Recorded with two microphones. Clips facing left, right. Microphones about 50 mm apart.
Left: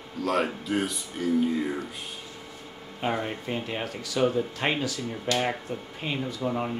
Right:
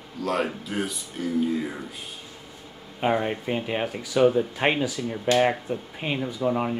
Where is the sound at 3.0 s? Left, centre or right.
Centre.